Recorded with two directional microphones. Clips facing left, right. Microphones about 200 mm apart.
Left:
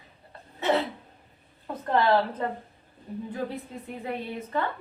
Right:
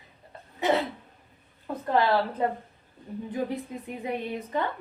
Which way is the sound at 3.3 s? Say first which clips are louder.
Right 4 dB; 15° right (ahead or behind).